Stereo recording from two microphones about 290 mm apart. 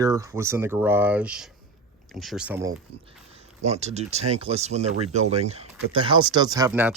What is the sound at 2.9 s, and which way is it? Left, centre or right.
Speech, right.